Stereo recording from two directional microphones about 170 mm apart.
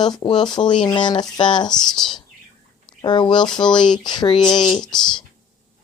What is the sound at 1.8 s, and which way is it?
Speech, centre (ahead or behind).